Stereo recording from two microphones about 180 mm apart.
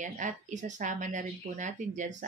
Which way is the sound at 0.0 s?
45° right (ahead or behind).